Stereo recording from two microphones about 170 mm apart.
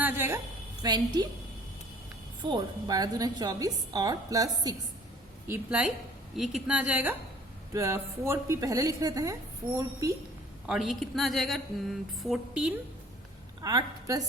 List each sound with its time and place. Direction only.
0.0 s a sound: 15° right (ahead or behind)
0.8 s a woman's voice: 25° right (ahead or behind)
2.4 s a woman's voice: 25° right (ahead or behind)
5.5 s a woman's voice: 5° right (ahead or behind)
10.7 s speech: centre (ahead or behind)
13.6 s a woman's voice: 20° right (ahead or behind)